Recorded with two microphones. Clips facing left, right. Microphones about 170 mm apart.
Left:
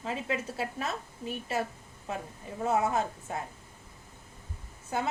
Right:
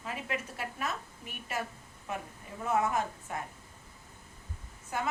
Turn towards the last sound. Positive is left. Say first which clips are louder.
# left 3 dB
turn(degrees=30)  # may be behind; listen again after turning